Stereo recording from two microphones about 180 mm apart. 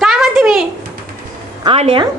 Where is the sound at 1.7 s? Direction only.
30° right (ahead or behind).